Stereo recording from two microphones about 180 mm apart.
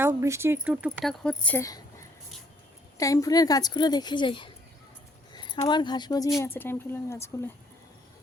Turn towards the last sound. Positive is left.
turn(degrees=15)  # may be behind; listen again after turning